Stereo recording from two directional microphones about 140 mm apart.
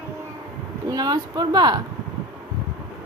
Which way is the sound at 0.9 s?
25° right (ahead or behind).